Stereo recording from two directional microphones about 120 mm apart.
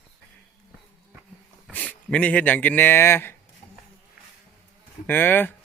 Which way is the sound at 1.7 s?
10° left (ahead or behind).